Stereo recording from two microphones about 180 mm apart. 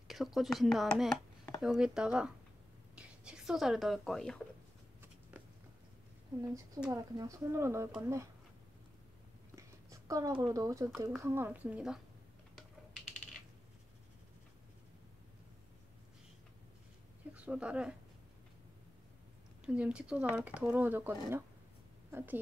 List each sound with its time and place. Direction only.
0.1 s speech: centre (ahead or behind)
6.9 s speech: 20° right (ahead or behind)
9.6 s a sound: 20° right (ahead or behind)
10.4 s speech: 20° right (ahead or behind)
17.3 s speech: 5° right (ahead or behind)
19.6 s a woman's voice: 5° right (ahead or behind)